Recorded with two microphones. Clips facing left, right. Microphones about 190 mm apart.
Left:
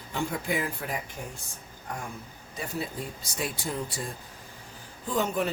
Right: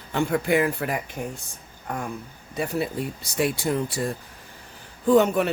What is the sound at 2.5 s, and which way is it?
Speech, 65° right (ahead or behind).